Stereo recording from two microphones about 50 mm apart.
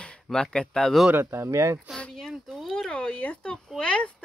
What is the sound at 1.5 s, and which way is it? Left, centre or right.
Speech, right.